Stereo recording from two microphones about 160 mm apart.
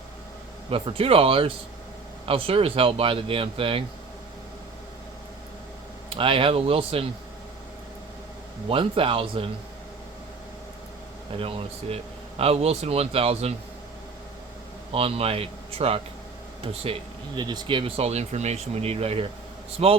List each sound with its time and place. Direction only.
0.7 s speech: 35° right (ahead or behind)
6.1 s speech: 35° right (ahead or behind)
8.7 s speech: 35° right (ahead or behind)
11.3 s speech: 35° right (ahead or behind)
14.9 s speech: 40° right (ahead or behind)